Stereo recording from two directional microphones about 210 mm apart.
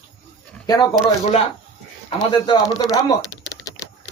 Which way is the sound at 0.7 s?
15° left (ahead or behind).